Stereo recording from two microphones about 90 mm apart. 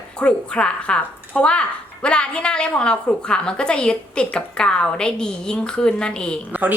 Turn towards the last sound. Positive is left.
turn(degrees=-20)  # may be behind; listen again after turning